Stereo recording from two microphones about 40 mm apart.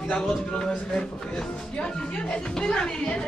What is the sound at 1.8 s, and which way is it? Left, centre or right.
Speech, left.